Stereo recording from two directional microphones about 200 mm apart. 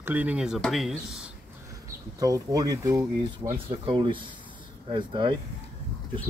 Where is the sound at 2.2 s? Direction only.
15° right (ahead or behind).